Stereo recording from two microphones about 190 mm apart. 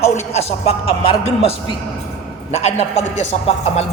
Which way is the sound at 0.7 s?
30° left (ahead or behind).